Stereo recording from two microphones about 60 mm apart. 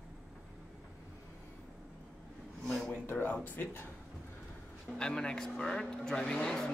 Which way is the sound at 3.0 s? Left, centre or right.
Left.